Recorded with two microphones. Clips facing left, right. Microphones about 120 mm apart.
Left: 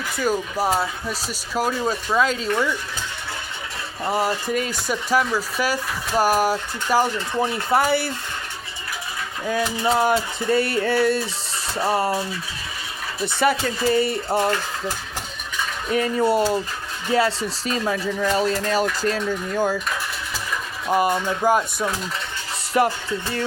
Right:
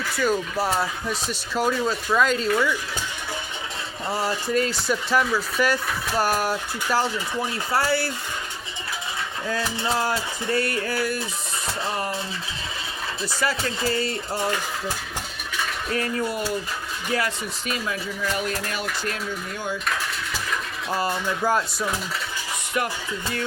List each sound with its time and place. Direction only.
0.2 s speech: 10° left (ahead or behind)
4.0 s speech: 15° left (ahead or behind)
9.5 s speech: 15° left (ahead or behind)
13.2 s speech: 20° left (ahead or behind)
15.9 s speech: 20° left (ahead or behind)
17.1 s speech: 30° left (ahead or behind)
20.9 s speech: 15° left (ahead or behind)
22.8 s speech: 30° left (ahead or behind)